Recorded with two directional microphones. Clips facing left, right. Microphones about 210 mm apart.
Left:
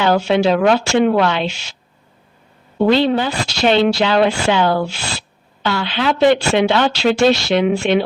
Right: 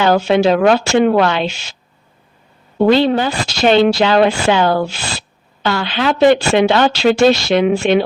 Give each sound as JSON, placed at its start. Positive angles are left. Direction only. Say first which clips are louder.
{"t": 0.0, "sound": "speech", "louder": "right 2 dB", "side_deg": -40}
{"t": 2.7, "sound": "speech", "louder": "right 2 dB", "side_deg": -45}